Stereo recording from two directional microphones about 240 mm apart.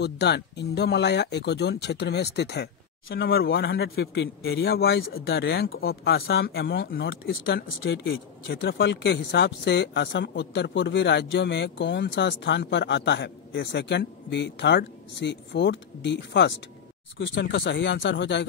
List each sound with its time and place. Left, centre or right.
0.0 s a man's voice: left